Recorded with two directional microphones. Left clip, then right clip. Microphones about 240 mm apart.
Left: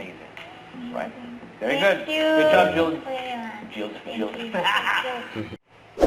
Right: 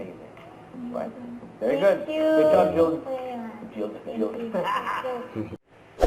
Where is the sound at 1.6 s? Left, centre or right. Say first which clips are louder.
Even; centre.